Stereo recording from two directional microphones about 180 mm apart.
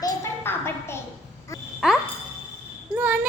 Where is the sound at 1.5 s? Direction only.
15° left (ahead or behind).